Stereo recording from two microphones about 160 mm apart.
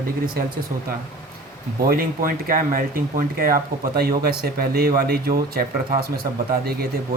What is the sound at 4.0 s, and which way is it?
Speech, 75° right (ahead or behind).